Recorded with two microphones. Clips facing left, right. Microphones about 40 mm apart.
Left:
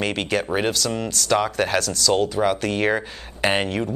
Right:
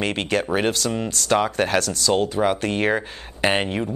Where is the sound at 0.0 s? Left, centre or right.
Right.